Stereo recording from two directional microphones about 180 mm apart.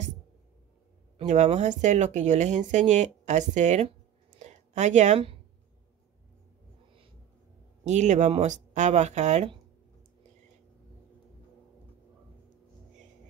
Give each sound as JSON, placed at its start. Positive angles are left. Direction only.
{"t": 1.1, "sound": "speech", "side_deg": -40}
{"t": 4.4, "sound": "a sound", "side_deg": -40}
{"t": 7.8, "sound": "speech", "side_deg": -40}